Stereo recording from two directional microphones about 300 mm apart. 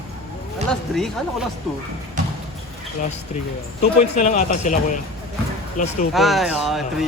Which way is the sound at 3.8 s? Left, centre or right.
Left.